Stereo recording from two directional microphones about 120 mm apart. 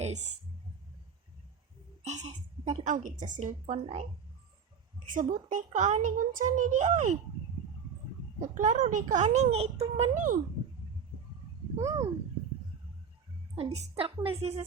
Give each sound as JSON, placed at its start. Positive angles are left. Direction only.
{"t": 0.0, "sound": "speech", "side_deg": -65}
{"t": 2.0, "sound": "a woman's voice", "side_deg": -70}
{"t": 3.4, "sound": "speech", "side_deg": -70}
{"t": 5.0, "sound": "a child's voice", "side_deg": -90}
{"t": 8.4, "sound": "a woman's voice", "side_deg": -90}
{"t": 11.8, "sound": "speech", "side_deg": -25}
{"t": 13.8, "sound": "a woman's voice", "side_deg": -55}